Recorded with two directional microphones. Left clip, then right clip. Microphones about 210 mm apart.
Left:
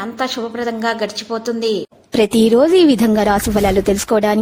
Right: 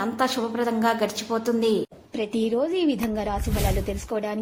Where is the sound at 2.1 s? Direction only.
60° left (ahead or behind).